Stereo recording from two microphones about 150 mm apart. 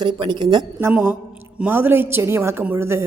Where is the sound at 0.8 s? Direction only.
15° right (ahead or behind).